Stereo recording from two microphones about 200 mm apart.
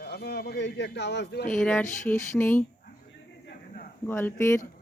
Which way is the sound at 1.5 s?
5° left (ahead or behind).